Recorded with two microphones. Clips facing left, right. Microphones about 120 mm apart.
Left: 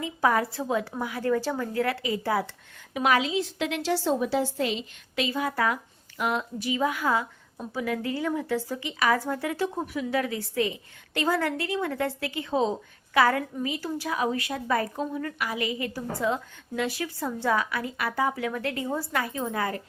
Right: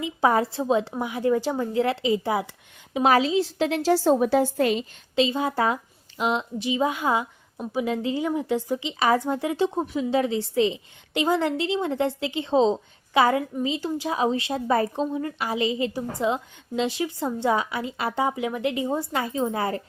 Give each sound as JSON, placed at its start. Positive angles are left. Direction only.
{"t": 0.0, "sound": "a woman's voice", "side_deg": -25}
{"t": 2.9, "sound": "a woman's voice", "side_deg": -35}
{"t": 5.1, "sound": "a woman's voice", "side_deg": -25}